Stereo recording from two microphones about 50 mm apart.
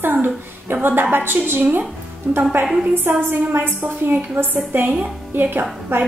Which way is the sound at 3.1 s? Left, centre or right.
Right.